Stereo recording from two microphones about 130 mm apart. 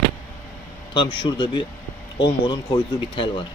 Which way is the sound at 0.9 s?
40° left (ahead or behind).